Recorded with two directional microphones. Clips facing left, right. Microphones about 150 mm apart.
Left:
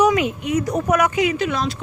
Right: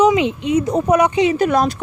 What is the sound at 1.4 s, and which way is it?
Speech, 50° right (ahead or behind).